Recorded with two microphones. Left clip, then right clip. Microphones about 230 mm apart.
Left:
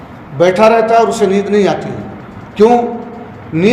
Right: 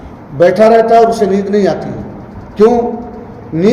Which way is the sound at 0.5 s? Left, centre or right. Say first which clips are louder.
Right 2 dB; left.